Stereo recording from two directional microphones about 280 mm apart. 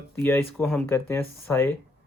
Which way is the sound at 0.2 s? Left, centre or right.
Centre.